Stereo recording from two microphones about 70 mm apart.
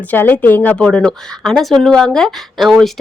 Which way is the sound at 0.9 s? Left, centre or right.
Centre.